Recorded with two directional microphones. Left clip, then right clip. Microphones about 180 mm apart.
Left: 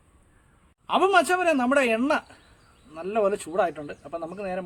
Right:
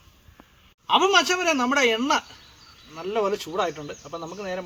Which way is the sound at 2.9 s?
15° left (ahead or behind).